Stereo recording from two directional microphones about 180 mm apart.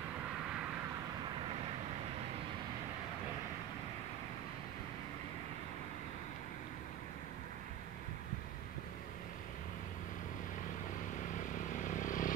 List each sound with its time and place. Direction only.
11.3 s vehicle: 45° left (ahead or behind)